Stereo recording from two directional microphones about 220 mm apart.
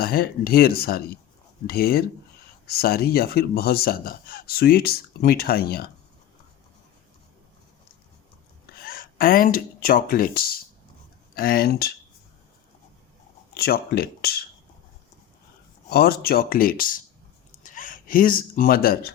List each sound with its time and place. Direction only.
0.0 s speech: 45° left (ahead or behind)
8.8 s speech: 40° left (ahead or behind)
13.5 s speech: 45° left (ahead or behind)
15.9 s speech: 45° left (ahead or behind)